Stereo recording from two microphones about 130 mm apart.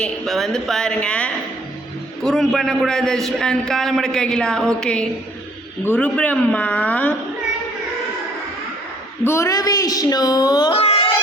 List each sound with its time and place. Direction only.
0.0 s a man's voice: centre (ahead or behind)
9.2 s a woman's voice: 20° left (ahead or behind)
10.8 s music: 45° left (ahead or behind)